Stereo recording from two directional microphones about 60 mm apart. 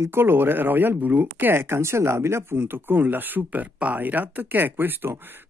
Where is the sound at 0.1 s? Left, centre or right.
Right.